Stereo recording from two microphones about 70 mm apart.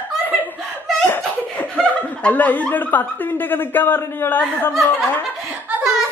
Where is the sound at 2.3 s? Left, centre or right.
Left.